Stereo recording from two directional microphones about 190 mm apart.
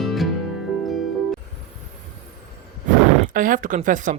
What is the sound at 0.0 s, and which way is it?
Music, centre (ahead or behind).